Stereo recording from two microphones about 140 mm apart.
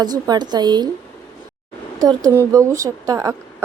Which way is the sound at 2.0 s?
25° right (ahead or behind).